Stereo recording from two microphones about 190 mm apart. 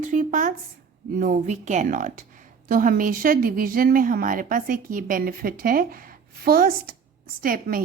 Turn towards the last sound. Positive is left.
turn(degrees=-50)  # may be behind; listen again after turning